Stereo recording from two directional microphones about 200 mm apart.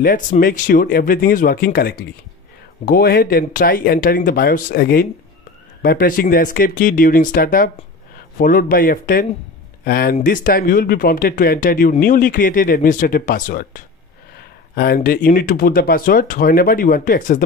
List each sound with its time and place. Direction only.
0.0 s speech: 45° left (ahead or behind)